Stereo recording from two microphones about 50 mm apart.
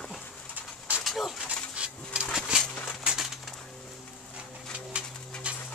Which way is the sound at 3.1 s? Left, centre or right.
Centre.